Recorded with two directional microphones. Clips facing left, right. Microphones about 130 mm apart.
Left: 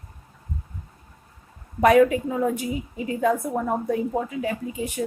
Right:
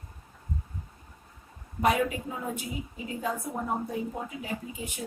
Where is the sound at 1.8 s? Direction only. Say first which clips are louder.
Left 10 dB; 75° left (ahead or behind).